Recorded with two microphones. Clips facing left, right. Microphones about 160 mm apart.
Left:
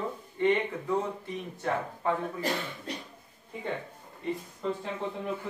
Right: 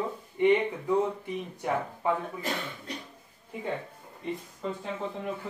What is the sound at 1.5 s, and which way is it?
Speech, 15° right (ahead or behind).